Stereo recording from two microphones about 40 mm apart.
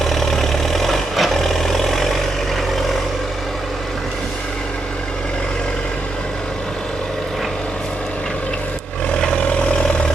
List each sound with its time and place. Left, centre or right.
0.0 s vehicle: centre
9.1 s vehicle: left